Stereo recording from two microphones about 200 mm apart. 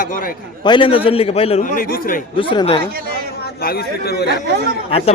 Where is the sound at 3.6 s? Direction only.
50° left (ahead or behind).